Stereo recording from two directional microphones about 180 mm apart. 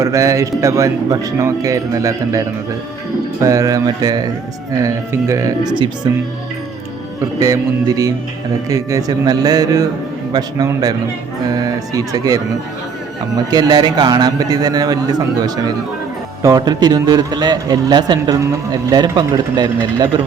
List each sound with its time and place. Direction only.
0.0 s speech: 15° right (ahead or behind)
3.4 s a man's voice: 20° right (ahead or behind)
7.4 s a man's voice: 20° right (ahead or behind)